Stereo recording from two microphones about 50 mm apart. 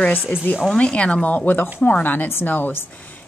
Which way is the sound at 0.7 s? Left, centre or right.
Left.